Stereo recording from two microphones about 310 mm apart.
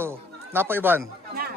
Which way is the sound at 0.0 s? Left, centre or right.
Centre.